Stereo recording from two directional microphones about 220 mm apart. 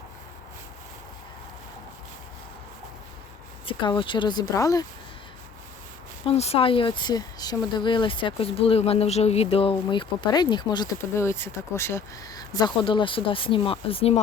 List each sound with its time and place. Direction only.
3.7 s speech: 20° left (ahead or behind)
6.2 s speech: 30° left (ahead or behind)